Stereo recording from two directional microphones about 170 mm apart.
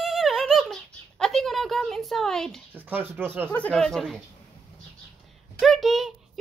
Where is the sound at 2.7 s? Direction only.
10° right (ahead or behind).